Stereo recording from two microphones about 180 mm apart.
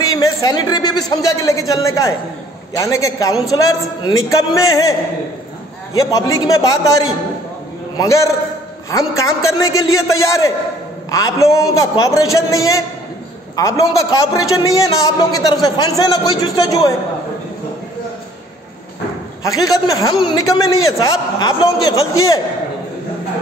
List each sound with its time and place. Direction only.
0.0 s a man's voice: 20° left (ahead or behind)
5.9 s a man's voice: 20° left (ahead or behind)
19.4 s a man's voice: 20° left (ahead or behind)